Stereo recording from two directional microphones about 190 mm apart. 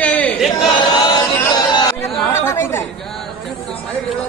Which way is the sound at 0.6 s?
20° left (ahead or behind).